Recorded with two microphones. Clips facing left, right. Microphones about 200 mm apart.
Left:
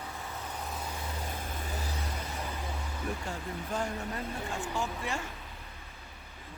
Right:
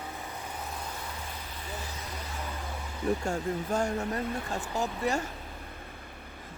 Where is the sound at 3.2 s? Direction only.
45° right (ahead or behind).